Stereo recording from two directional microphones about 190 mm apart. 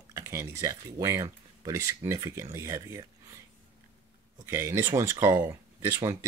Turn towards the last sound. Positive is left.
turn(degrees=-15)  # may be behind; listen again after turning